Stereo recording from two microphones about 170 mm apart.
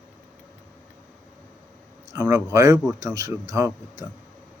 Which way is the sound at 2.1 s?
15° right (ahead or behind).